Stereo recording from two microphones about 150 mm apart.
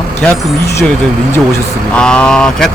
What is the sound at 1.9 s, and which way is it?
Speech, 5° left (ahead or behind).